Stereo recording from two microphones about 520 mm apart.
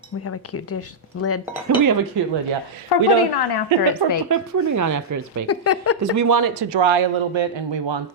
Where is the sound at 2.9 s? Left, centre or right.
Left.